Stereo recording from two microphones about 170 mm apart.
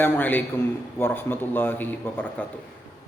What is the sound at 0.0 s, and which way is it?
A man's voice, 10° left (ahead or behind).